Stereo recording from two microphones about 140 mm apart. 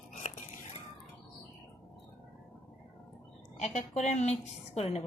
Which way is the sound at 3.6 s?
55° left (ahead or behind).